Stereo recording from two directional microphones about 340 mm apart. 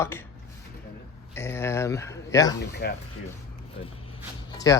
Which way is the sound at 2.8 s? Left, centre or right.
Left.